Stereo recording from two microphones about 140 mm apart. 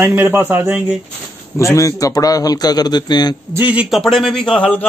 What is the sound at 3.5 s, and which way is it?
A man's voice, 10° right (ahead or behind).